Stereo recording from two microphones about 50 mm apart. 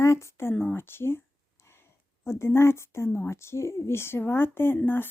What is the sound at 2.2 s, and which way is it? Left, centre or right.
Speech, left.